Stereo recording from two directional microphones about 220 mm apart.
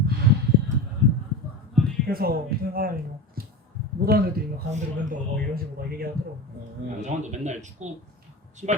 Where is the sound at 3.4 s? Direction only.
40° right (ahead or behind).